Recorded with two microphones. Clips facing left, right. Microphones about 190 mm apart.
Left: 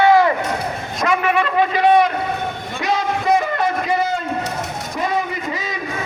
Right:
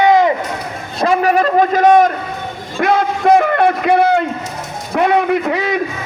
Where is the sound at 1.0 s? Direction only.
35° right (ahead or behind).